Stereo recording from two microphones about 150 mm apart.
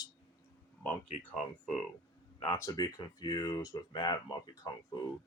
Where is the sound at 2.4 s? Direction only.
20° left (ahead or behind).